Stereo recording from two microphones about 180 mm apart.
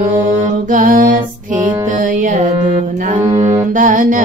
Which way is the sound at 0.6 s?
45° right (ahead or behind).